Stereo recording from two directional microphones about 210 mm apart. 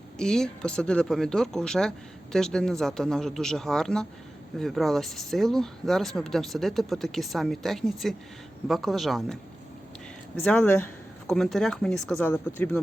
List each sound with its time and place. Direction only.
0.2 s speech: 5° left (ahead or behind)